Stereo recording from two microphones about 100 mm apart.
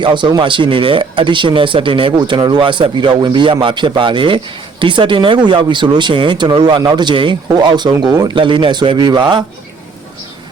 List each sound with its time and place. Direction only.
0.0 s speech: 50° right (ahead or behind)